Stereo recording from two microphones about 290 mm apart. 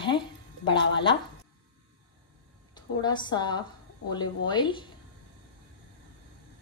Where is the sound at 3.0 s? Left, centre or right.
Centre.